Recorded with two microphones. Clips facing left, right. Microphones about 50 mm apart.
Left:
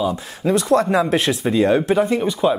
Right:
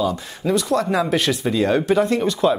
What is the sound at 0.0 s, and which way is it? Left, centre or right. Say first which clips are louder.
Speech: even; centre.